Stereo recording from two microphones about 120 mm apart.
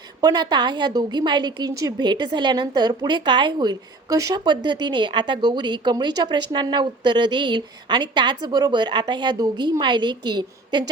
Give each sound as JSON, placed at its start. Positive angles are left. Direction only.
{"t": 0.2, "sound": "a woman's voice", "side_deg": -35}